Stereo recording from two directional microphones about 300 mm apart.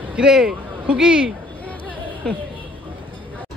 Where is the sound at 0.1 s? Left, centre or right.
Centre.